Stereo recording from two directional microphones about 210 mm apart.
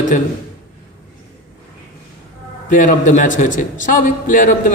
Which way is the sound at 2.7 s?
40° left (ahead or behind).